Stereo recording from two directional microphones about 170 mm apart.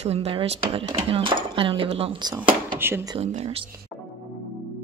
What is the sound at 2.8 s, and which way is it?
Speech, 15° right (ahead or behind).